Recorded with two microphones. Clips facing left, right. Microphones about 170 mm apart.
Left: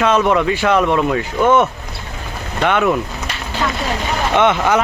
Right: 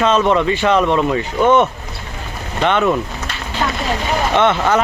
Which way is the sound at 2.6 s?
5° left (ahead or behind).